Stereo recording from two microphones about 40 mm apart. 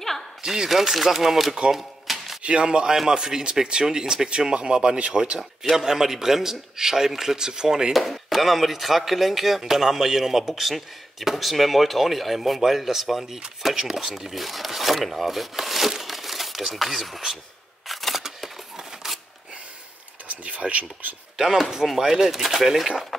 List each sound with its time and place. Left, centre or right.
0.4 s speech: centre
0.7 s speech: centre
1.7 s a sound: centre
2.4 s a man's voice: right
5.1 s a man's voice: centre
8.0 s speech: centre
17.8 s a sound: centre
20.2 s speech: right
22.0 s speech: centre